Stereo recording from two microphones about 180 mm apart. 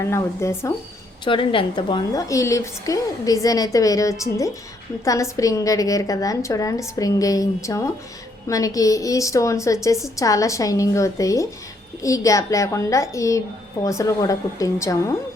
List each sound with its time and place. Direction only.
0.0 s a woman's voice: 15° left (ahead or behind)
1.2 s a woman's voice: 30° left (ahead or behind)